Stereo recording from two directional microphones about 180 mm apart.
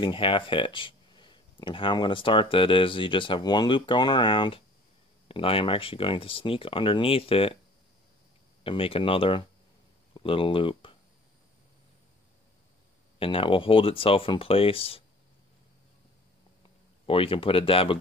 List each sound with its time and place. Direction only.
0.0 s speech: 25° left (ahead or behind)
8.6 s speech: 30° left (ahead or behind)
13.2 s speech: 30° left (ahead or behind)
17.0 s speech: 30° left (ahead or behind)